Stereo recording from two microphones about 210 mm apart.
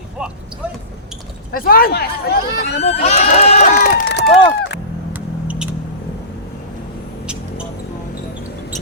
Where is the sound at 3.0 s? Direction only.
30° left (ahead or behind); by 4.2 s 50° left (ahead or behind).